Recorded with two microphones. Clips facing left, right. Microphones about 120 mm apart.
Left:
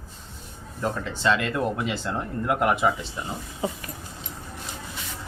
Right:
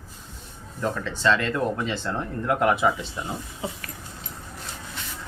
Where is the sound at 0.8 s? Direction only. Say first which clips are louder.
Right 1 dB; 15° left (ahead or behind).